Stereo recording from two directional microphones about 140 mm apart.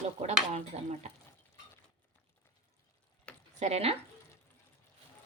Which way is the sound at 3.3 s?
10° left (ahead or behind).